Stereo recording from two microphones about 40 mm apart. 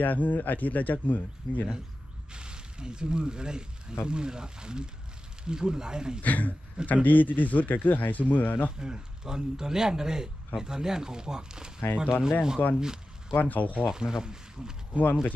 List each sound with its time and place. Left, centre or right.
0.0 s speech: left
2.3 s speech: right
6.2 s speech: left
8.7 s speech: centre
12.6 s speech: left
13.8 s speech: centre
14.9 s speech: right